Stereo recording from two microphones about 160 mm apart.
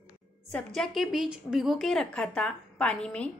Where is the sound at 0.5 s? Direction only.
5° left (ahead or behind).